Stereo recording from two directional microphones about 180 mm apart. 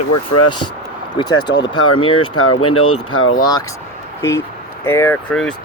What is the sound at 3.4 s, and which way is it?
Speech, 20° left (ahead or behind).